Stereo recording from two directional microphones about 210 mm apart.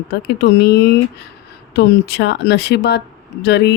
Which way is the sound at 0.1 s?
50° left (ahead or behind).